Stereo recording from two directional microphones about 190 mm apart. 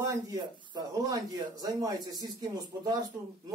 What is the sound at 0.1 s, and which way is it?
Speech, 20° right (ahead or behind).